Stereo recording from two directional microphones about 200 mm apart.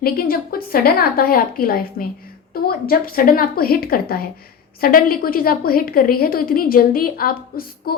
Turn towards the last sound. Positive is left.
turn(degrees=50)  # may be behind; listen again after turning